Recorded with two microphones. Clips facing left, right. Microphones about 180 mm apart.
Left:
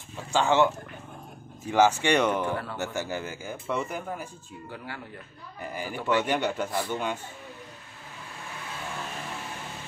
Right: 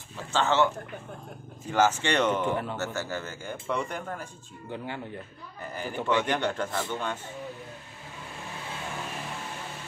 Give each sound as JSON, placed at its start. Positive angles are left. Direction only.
{"t": 0.3, "sound": "speech", "side_deg": 15}
{"t": 2.4, "sound": "speech", "side_deg": -20}
{"t": 2.8, "sound": "speech", "side_deg": 15}
{"t": 4.6, "sound": "speech", "side_deg": -20}
{"t": 5.6, "sound": "speech", "side_deg": 10}